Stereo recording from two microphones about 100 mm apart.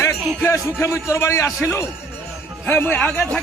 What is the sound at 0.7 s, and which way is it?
Speech, 30° left (ahead or behind).